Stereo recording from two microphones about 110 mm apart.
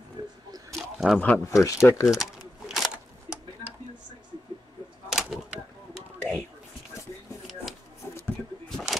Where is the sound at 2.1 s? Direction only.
Centre (ahead or behind).